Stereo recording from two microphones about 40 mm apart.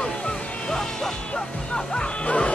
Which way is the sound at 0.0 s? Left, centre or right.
Left.